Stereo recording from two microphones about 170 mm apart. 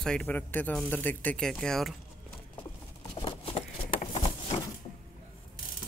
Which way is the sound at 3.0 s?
30° left (ahead or behind).